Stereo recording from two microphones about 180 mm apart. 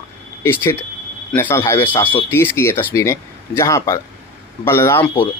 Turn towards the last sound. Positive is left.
turn(degrees=15)  # may be behind; listen again after turning